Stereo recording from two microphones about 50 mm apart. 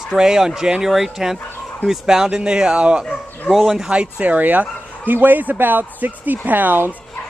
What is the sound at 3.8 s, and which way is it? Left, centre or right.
A man's voice, right.